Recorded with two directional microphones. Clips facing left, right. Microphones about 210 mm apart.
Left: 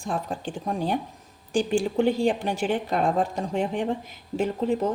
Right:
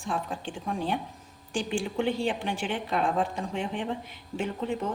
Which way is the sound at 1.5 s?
40° left (ahead or behind).